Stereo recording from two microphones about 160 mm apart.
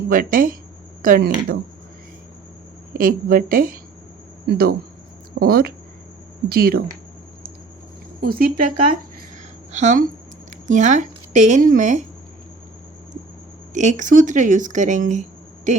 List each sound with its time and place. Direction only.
0.1 s a woman's voice: 60° right (ahead or behind)
3.0 s a woman's voice: 60° right (ahead or behind)
8.2 s speech: 65° right (ahead or behind)
9.7 s a woman's voice: 50° right (ahead or behind)
13.7 s a woman's voice: 50° right (ahead or behind)